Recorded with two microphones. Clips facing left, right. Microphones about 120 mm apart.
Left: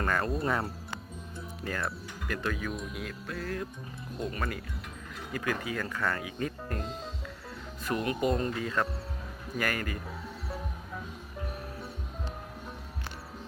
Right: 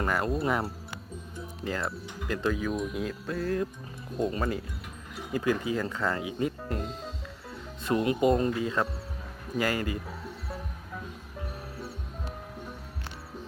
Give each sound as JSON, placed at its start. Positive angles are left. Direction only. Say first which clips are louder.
{"t": 0.0, "sound": "speech", "louder": "right 2 dB", "side_deg": -15}
{"t": 1.6, "sound": "speech", "louder": "right 2 dB", "side_deg": -25}
{"t": 7.9, "sound": "speech", "louder": "right 5 dB", "side_deg": -25}